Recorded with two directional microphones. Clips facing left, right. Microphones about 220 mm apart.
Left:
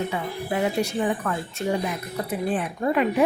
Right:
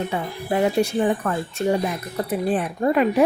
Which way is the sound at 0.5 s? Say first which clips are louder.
Right 5 dB; 30° right (ahead or behind).